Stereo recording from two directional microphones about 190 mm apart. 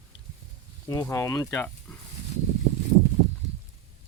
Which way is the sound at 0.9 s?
15° left (ahead or behind).